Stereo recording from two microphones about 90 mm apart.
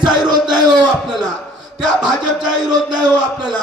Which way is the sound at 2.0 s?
Centre (ahead or behind).